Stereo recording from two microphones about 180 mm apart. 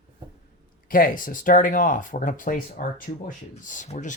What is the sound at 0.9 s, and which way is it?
Speech, 50° left (ahead or behind).